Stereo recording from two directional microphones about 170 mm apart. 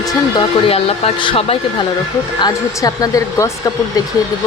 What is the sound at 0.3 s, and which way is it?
Speech, 35° left (ahead or behind).